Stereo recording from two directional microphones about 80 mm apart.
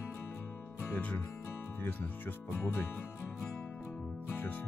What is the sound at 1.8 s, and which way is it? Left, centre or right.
Speech, left.